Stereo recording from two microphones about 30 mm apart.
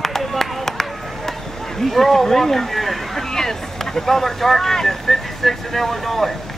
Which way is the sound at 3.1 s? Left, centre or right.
Centre.